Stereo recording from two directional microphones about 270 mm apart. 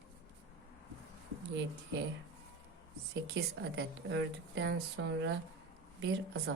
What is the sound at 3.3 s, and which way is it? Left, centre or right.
A woman's voice, right.